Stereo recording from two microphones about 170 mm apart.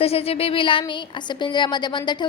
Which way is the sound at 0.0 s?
35° left (ahead or behind).